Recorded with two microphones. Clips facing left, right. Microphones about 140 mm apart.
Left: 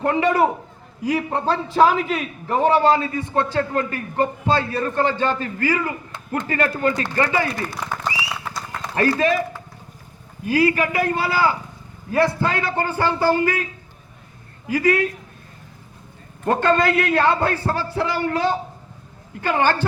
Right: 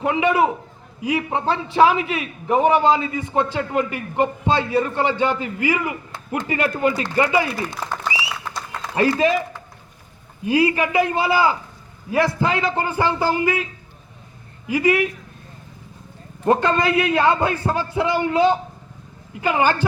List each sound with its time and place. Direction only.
0.0 s a man's voice: 5° right (ahead or behind)
9.0 s a man's voice: 20° right (ahead or behind)
10.4 s a man's voice: 20° right (ahead or behind)
14.7 s a man's voice: 15° right (ahead or behind)
16.4 s a man's voice: 20° right (ahead or behind)